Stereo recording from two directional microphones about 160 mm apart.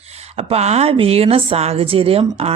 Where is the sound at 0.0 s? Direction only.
40° right (ahead or behind).